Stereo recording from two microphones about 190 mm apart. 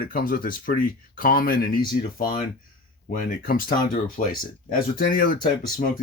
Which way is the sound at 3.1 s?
45° left (ahead or behind).